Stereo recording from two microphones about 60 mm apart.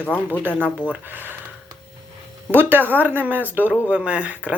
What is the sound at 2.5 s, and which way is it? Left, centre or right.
Speech, right.